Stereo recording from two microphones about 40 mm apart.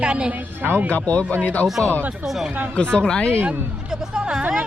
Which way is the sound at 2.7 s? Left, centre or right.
Left.